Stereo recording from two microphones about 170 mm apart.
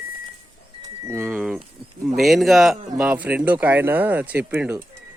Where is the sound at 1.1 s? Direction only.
10° right (ahead or behind).